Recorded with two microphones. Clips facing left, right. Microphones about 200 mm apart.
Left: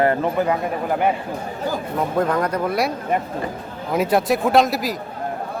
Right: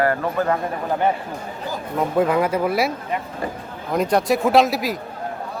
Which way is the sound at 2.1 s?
5° right (ahead or behind).